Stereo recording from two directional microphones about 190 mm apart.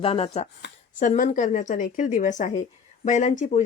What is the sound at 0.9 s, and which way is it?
Speech, 40° left (ahead or behind).